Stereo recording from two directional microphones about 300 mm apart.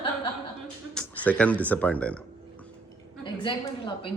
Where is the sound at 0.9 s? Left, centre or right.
Centre.